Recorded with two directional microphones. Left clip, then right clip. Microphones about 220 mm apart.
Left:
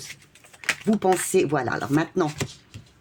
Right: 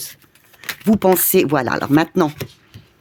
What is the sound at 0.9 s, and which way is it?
Speech, 45° right (ahead or behind).